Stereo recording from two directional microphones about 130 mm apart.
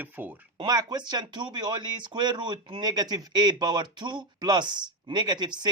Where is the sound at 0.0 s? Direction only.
15° right (ahead or behind).